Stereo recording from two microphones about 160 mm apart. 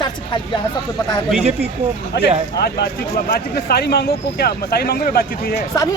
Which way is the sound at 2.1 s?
90° left.